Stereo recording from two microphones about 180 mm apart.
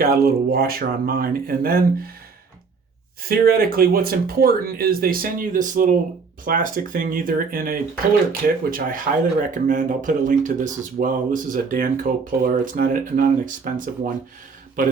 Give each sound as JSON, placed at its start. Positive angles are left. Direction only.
{"t": 0.0, "sound": "speech", "side_deg": -55}
{"t": 3.2, "sound": "speech", "side_deg": -55}